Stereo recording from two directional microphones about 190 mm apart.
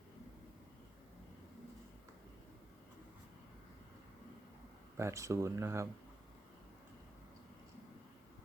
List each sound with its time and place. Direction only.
4.9 s speech: 15° right (ahead or behind)